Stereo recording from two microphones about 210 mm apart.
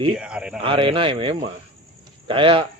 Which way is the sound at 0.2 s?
5° right (ahead or behind).